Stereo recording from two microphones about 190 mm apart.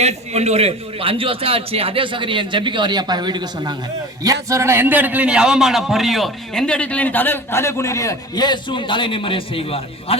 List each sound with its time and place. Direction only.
0.0 s a man's voice: 35° right (ahead or behind); by 10.2 s 30° left (ahead or behind)